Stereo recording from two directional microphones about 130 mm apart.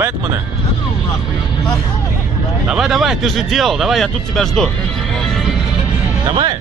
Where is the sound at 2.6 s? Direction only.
5° right (ahead or behind).